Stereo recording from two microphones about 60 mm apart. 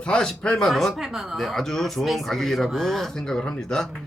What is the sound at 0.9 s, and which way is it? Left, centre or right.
Speech, centre.